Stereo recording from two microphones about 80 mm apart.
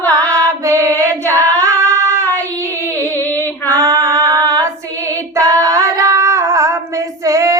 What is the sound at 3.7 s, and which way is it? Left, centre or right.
Female singing, right.